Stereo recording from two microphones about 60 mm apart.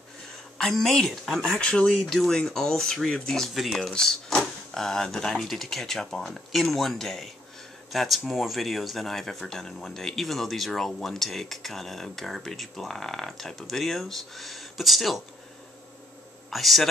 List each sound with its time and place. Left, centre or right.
0.6 s speech: centre
1.6 s speech: centre
2.0 s speech: centre
3.9 s speech: centre
16.4 s a man's voice: centre